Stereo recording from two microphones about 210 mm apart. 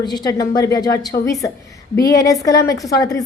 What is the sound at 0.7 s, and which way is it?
Speech, 50° left (ahead or behind).